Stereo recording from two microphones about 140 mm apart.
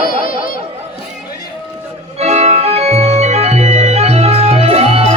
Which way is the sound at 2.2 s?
50° right (ahead or behind).